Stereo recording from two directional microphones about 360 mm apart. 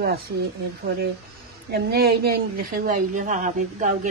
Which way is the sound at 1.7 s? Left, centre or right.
Right.